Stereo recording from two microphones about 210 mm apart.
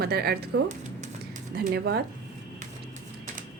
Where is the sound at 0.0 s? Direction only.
50° right (ahead or behind).